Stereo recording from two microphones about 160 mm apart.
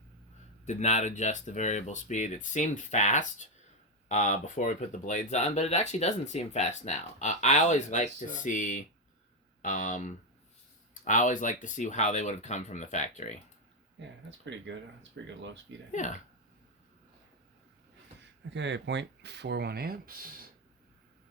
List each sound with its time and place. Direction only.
0.6 s speech: 45° left (ahead or behind)
14.0 s speech: 90° right
15.9 s speech: 50° left (ahead or behind)
18.5 s speech: 90° right; by 20.3 s 65° right (ahead or behind)